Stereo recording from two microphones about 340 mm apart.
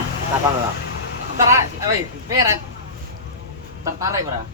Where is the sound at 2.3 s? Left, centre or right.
Centre.